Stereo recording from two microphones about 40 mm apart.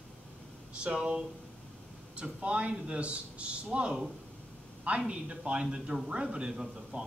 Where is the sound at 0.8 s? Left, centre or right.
Right.